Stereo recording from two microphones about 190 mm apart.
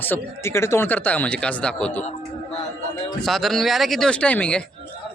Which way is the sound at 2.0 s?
35° left (ahead or behind).